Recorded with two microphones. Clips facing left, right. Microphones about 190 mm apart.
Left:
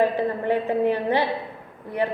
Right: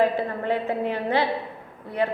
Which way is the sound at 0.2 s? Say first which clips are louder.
Left 3 dB; 15° left (ahead or behind).